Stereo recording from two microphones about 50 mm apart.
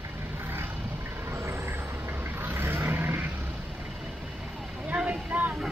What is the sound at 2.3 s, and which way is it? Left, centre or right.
Vehicle, right.